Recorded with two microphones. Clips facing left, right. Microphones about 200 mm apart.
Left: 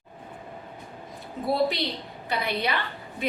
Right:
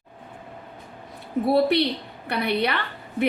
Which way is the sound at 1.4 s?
65° right (ahead or behind).